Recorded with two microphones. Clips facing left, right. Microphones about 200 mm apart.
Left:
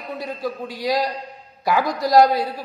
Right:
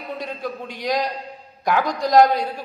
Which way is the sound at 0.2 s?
5° left (ahead or behind).